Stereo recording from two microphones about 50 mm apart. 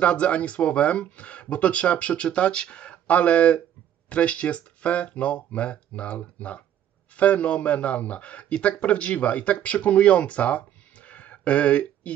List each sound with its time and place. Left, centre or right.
0.0 s a man's voice: left